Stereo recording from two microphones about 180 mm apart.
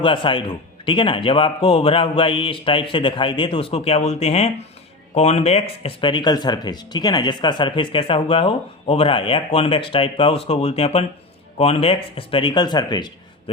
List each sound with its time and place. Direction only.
0.0 s speech: 30° left (ahead or behind)